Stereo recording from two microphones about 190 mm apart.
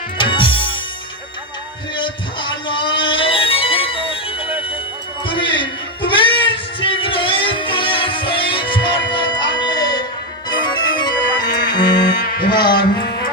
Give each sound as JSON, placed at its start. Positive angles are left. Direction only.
{"t": 0.2, "sound": "music", "side_deg": 25}
{"t": 2.0, "sound": "music", "side_deg": 25}
{"t": 5.2, "sound": "music", "side_deg": 25}
{"t": 10.5, "sound": "organ", "side_deg": 20}
{"t": 11.7, "sound": "music", "side_deg": 25}
{"t": 12.5, "sound": "a man's voice", "side_deg": 25}